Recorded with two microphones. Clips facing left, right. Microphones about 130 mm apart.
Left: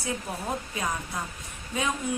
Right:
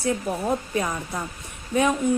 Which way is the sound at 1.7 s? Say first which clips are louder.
Right 8 dB; 60° right (ahead or behind).